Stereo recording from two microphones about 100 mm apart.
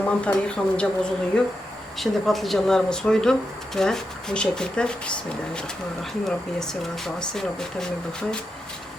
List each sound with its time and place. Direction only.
0.0 s speech: 15° left (ahead or behind)